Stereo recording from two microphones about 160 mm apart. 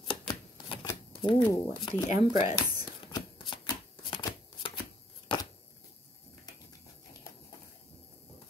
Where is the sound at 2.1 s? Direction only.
20° right (ahead or behind).